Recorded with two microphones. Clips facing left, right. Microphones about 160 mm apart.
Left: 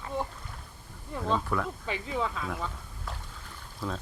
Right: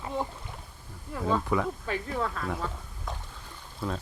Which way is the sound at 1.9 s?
5° left (ahead or behind).